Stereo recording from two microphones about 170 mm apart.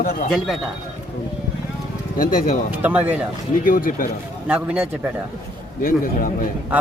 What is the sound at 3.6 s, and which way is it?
Speech, 55° left (ahead or behind).